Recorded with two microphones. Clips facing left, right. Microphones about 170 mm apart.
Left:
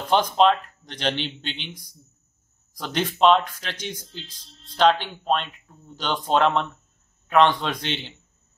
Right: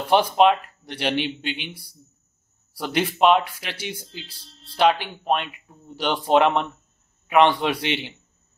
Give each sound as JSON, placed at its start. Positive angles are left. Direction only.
{"t": 0.1, "sound": "speech", "side_deg": -10}